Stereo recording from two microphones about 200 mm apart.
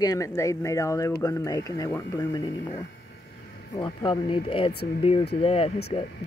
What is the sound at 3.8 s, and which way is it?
Speech, 25° left (ahead or behind).